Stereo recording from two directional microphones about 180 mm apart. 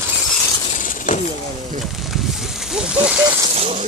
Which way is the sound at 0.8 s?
45° left (ahead or behind).